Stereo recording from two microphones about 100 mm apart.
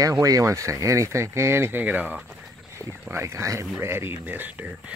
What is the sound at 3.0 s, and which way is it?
Speech, 25° right (ahead or behind).